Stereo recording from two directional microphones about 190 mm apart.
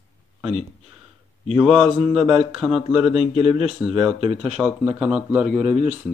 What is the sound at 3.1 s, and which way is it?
Speech, 35° left (ahead or behind).